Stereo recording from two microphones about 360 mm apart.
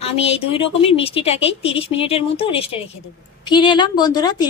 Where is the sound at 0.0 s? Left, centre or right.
Centre.